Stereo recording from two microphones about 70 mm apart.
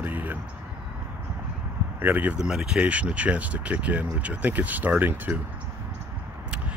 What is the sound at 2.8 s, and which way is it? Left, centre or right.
Speech, centre.